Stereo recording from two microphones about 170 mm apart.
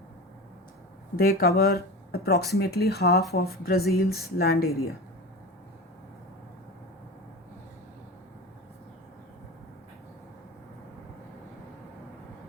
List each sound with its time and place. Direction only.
1.1 s speech: 65° left (ahead or behind)